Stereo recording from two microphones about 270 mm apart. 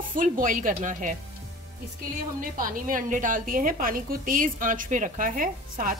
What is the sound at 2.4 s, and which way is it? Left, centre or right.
A woman's voice, right.